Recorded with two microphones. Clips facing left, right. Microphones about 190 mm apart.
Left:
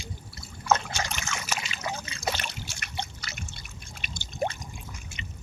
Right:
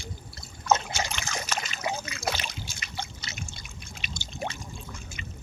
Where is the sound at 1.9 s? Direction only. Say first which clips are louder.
Right 3 dB; 20° right (ahead or behind).